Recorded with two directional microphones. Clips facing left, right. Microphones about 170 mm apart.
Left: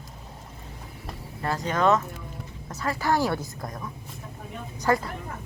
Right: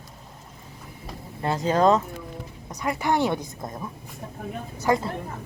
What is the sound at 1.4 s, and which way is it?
Speech, 25° right (ahead or behind).